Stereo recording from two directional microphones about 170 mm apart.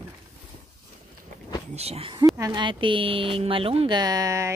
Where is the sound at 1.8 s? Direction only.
35° right (ahead or behind).